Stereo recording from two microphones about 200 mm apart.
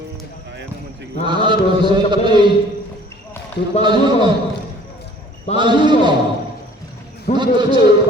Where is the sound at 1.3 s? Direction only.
25° right (ahead or behind).